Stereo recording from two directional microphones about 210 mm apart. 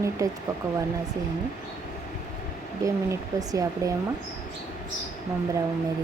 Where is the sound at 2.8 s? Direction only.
15° right (ahead or behind).